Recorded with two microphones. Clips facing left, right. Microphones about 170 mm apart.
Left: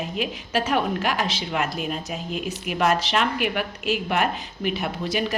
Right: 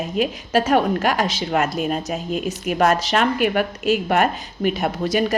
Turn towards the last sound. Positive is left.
turn(degrees=-45)  # may be behind; listen again after turning